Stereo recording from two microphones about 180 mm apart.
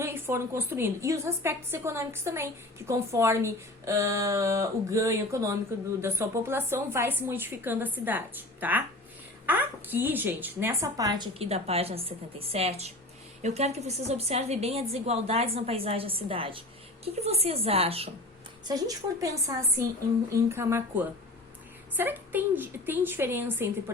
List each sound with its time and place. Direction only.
0.0 s a woman's voice: 15° right (ahead or behind)
11.4 s a woman's voice: 35° right (ahead or behind)
18.7 s a woman's voice: 20° right (ahead or behind)